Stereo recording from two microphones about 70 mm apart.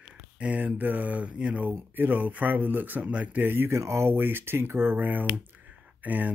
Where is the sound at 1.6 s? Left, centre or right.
Right.